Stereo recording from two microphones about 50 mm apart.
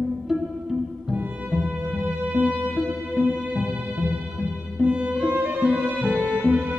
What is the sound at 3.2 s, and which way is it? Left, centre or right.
Music, right.